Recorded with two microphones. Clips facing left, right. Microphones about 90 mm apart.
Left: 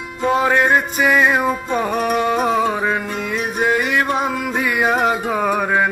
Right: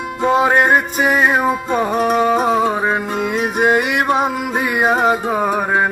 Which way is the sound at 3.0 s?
50° right (ahead or behind).